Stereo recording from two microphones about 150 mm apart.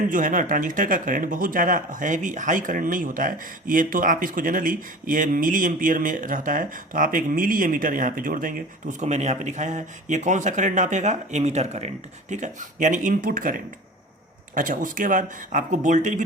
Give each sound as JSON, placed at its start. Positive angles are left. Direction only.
{"t": 0.1, "sound": "speech", "side_deg": -60}